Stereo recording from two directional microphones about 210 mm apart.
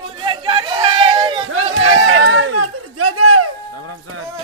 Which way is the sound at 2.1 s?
70° right (ahead or behind).